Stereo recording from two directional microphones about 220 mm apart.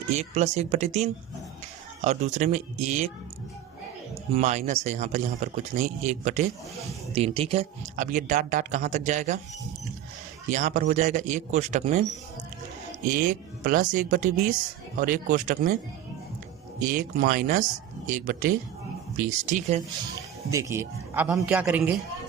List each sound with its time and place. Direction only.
0.1 s speech: 30° right (ahead or behind)
4.4 s speech: 30° right (ahead or behind)
10.5 s speech: 35° right (ahead or behind)
13.1 s speech: 40° right (ahead or behind)
16.8 s speech: 40° right (ahead or behind)
20.1 s a man's voice: 15° right (ahead or behind)